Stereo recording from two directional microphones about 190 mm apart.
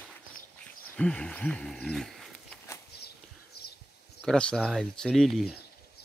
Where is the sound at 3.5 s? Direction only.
55° left (ahead or behind).